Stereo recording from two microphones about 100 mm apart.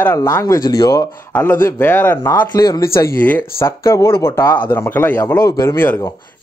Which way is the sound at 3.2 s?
20° left (ahead or behind).